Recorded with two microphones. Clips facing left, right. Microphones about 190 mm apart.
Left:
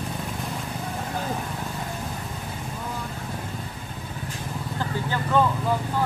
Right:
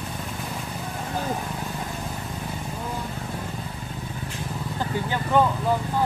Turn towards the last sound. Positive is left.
turn(degrees=-15)  # may be behind; listen again after turning